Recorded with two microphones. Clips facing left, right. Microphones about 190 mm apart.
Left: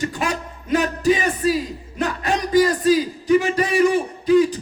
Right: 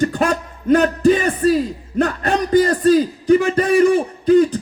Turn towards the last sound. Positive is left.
turn(degrees=-55)  # may be behind; listen again after turning